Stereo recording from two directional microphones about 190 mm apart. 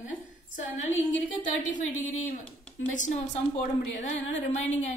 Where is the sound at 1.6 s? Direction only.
40° left (ahead or behind).